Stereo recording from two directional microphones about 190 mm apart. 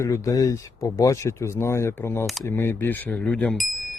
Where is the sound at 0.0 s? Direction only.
15° left (ahead or behind).